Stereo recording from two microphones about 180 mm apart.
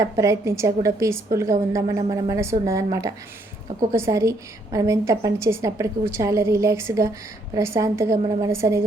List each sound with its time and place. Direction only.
0.0 s a woman's voice: 15° right (ahead or behind)